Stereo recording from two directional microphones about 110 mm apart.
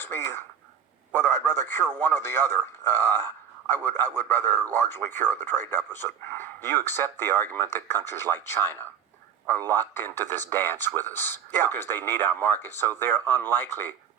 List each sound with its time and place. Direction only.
0.0 s a man's voice: 20° left (ahead or behind)